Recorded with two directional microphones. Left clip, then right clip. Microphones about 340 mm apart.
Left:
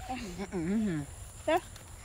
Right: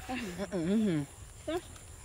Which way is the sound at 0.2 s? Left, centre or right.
Centre.